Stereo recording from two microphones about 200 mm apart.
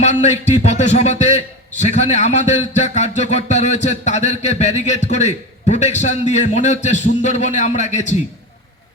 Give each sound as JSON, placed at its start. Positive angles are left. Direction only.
{"t": 0.0, "sound": "a man's voice", "side_deg": 35}